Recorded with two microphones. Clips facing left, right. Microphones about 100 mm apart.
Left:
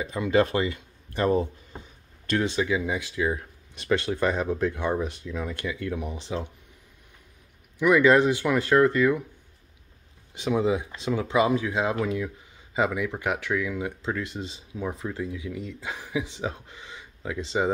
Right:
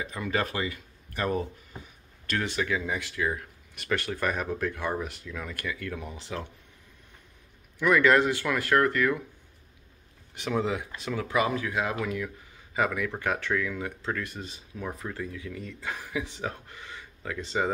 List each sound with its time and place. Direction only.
0.0 s speech: 25° left (ahead or behind)
7.8 s speech: 15° left (ahead or behind)
10.3 s speech: 20° left (ahead or behind)